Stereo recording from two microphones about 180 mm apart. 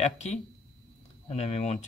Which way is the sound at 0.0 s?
35° left (ahead or behind).